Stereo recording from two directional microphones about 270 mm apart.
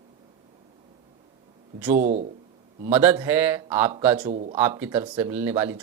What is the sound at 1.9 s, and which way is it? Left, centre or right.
Speech, right.